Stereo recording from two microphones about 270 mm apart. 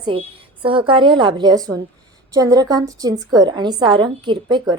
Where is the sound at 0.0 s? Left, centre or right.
Centre.